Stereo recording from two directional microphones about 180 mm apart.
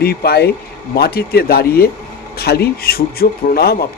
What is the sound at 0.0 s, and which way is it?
A man's voice, 60° left (ahead or behind).